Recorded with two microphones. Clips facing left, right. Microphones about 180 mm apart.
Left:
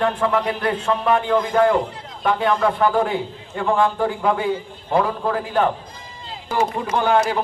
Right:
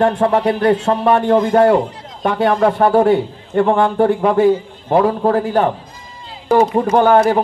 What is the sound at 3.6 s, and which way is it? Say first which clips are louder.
Speech: right 6 dB; 60° right (ahead or behind).